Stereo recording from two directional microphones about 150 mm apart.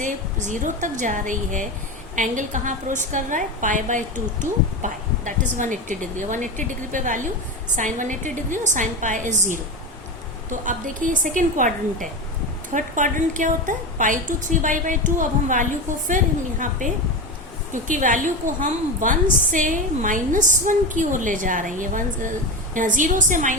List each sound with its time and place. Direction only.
0.0 s a woman's voice: 55° right (ahead or behind)